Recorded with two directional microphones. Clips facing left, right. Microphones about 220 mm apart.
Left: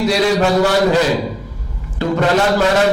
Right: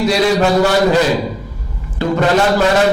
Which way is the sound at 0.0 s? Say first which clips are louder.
Right 1 dB; 10° right (ahead or behind).